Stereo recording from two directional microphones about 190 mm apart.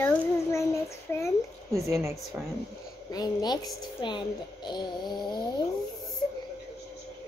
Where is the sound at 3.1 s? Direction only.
20° left (ahead or behind).